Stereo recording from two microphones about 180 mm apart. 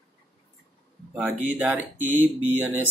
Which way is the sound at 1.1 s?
5° right (ahead or behind).